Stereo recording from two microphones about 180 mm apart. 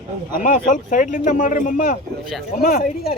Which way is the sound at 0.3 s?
45° left (ahead or behind).